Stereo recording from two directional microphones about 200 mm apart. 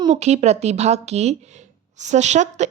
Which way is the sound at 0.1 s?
35° right (ahead or behind).